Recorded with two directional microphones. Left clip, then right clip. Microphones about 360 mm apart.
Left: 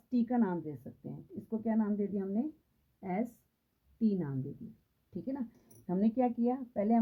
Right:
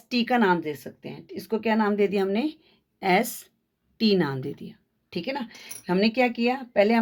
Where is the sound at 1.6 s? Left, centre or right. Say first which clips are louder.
Right 12 dB; centre.